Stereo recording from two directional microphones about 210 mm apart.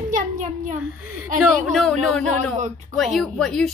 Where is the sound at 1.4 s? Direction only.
Centre (ahead or behind).